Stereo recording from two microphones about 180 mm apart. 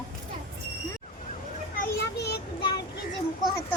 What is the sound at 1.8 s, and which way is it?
Children playing, 65° left (ahead or behind).